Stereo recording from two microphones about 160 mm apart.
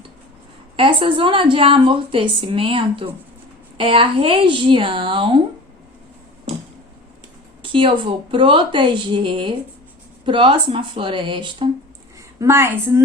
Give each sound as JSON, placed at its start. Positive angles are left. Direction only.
{"t": 0.8, "sound": "a woman's voice", "side_deg": -30}
{"t": 7.6, "sound": "a woman's voice", "side_deg": -30}
{"t": 12.4, "sound": "a woman's voice", "side_deg": -15}